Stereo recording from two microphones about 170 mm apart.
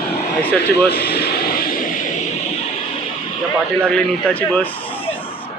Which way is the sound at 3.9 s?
5° left (ahead or behind).